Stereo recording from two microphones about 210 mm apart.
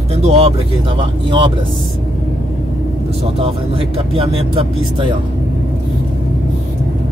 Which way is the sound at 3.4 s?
25° right (ahead or behind).